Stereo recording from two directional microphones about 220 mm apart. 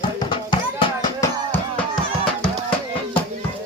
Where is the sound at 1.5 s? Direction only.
5° left (ahead or behind).